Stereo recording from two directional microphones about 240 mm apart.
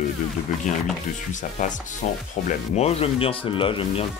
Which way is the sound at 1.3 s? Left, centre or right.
Left.